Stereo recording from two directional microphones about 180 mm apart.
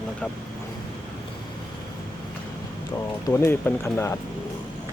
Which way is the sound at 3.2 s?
15° left (ahead or behind).